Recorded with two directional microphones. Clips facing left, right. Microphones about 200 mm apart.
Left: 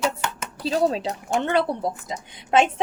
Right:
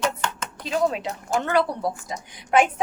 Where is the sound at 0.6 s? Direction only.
35° left (ahead or behind).